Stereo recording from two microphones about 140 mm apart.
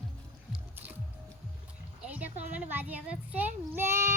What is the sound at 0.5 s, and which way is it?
Music, 10° right (ahead or behind).